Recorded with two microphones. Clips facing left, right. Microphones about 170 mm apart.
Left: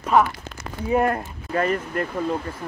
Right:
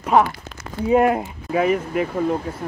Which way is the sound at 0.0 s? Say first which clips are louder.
Right 2 dB; 15° right (ahead or behind).